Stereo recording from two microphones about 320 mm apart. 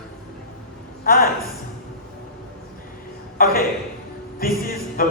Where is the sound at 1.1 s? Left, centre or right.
Left.